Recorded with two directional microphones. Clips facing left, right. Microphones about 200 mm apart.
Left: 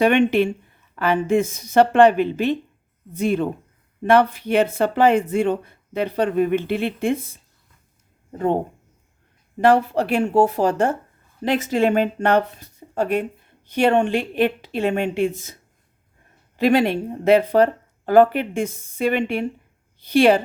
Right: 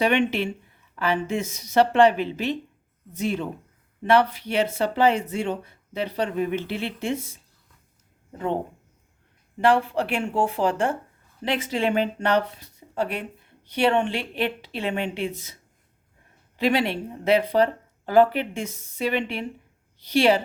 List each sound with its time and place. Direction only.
0.0 s speech: 50° left (ahead or behind)
8.3 s speech: 45° left (ahead or behind)
9.6 s speech: 40° left (ahead or behind)
16.6 s speech: 45° left (ahead or behind)